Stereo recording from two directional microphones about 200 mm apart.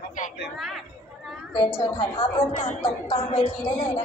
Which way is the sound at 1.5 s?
25° left (ahead or behind).